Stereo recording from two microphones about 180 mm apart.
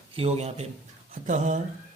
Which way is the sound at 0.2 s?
35° right (ahead or behind).